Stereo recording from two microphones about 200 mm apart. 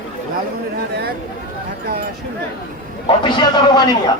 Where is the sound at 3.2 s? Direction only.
20° left (ahead or behind).